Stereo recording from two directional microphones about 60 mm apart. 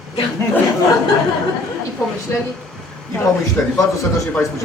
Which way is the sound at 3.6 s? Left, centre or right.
Left.